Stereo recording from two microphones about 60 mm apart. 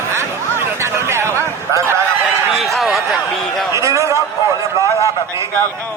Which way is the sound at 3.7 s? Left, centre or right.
Right.